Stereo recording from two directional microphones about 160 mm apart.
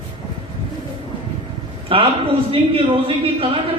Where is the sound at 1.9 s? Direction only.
35° right (ahead or behind).